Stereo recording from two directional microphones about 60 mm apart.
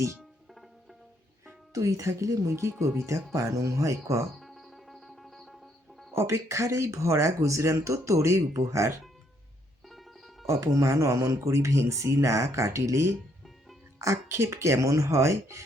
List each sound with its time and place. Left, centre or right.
1.7 s speech: right
4.4 s music: centre
6.1 s speech: right
9.9 s music: centre
10.4 s speech: right